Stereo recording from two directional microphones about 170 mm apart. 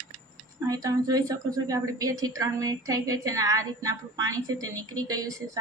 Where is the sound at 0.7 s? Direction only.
20° right (ahead or behind).